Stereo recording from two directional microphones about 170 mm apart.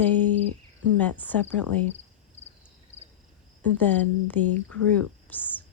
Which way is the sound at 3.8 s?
10° left (ahead or behind).